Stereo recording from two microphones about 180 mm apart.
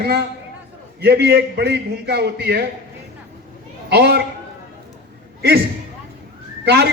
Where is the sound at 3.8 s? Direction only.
65° right (ahead or behind).